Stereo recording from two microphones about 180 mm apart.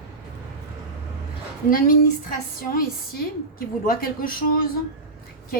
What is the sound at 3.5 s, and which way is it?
A woman's voice, 55° left (ahead or behind).